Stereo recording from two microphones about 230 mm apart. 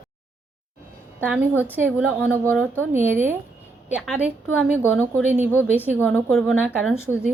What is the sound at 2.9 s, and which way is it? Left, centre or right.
A woman's voice, centre.